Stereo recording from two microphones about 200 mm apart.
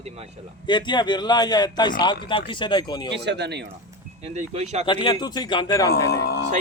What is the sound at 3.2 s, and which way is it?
Speech, 60° right (ahead or behind).